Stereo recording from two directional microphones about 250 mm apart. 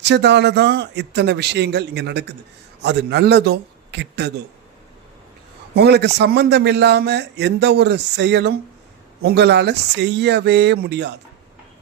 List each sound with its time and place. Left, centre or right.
0.0 s a man's voice: right
5.7 s a man's voice: right